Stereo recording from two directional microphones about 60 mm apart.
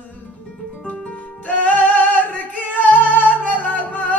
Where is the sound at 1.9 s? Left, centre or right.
Left.